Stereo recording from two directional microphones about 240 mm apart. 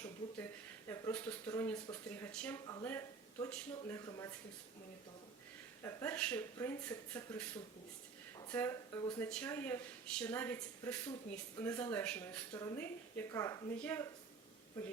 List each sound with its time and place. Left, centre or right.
0.9 s speech: centre
5.8 s speech: centre
8.4 s speech: centre